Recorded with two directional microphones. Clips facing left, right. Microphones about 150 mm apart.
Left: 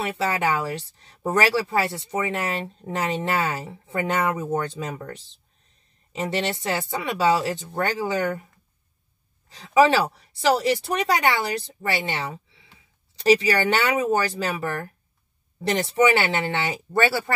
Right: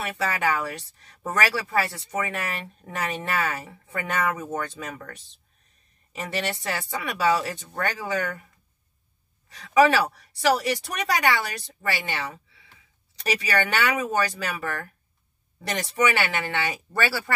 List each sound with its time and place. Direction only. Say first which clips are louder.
0.0 s speech: left 2 dB; 25° left (ahead or behind)
9.5 s speech: left 1 dB; 25° left (ahead or behind)